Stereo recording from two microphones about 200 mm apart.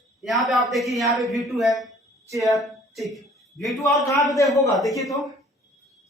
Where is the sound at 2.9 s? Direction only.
Centre (ahead or behind).